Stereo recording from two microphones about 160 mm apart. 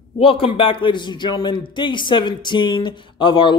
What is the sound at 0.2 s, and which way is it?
A man's voice, 35° left (ahead or behind).